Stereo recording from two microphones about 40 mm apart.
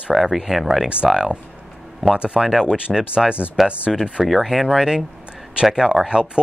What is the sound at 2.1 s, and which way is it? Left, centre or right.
Speech, right.